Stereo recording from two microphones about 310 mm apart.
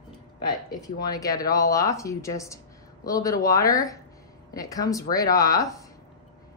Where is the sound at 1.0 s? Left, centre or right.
Centre.